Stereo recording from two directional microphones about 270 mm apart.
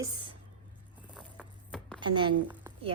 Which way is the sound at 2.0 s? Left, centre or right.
Centre.